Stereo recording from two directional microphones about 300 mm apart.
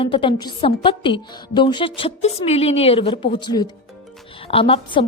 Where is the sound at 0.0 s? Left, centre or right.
Centre.